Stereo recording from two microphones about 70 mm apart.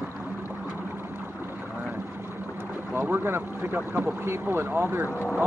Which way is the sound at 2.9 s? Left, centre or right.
Right.